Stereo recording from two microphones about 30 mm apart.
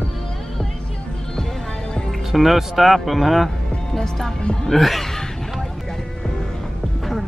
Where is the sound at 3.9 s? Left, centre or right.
Centre.